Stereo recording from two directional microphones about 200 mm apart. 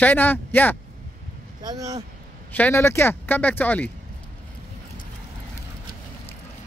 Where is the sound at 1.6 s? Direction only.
15° right (ahead or behind).